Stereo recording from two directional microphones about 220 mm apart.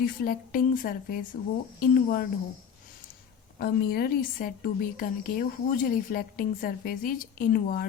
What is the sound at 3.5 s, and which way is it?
A woman's voice, 45° left (ahead or behind).